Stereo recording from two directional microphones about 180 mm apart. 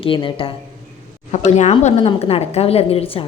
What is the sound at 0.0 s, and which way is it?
Speech, 30° left (ahead or behind).